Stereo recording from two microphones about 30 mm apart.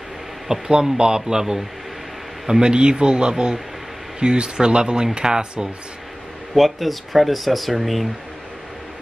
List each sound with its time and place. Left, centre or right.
0.5 s speech: right
6.5 s speech: centre